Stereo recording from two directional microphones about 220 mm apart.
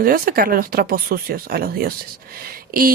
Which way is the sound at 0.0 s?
40° right (ahead or behind).